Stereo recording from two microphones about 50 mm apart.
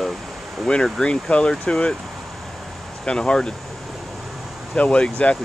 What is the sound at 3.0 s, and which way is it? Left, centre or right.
Speech, centre.